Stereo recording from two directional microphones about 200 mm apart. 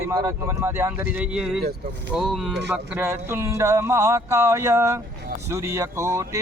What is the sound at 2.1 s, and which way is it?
Speech, centre (ahead or behind).